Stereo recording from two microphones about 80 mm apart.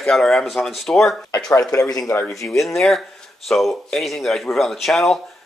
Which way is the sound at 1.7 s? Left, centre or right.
Left.